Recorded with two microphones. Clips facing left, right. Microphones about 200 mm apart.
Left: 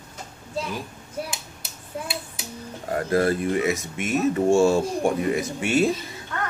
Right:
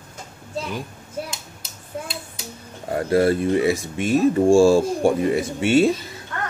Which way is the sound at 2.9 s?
30° right (ahead or behind).